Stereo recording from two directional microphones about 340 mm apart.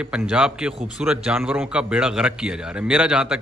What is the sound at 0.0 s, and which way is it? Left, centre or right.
A man's voice, centre.